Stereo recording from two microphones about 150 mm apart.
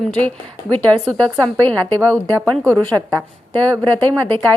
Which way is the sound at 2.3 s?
20° right (ahead or behind).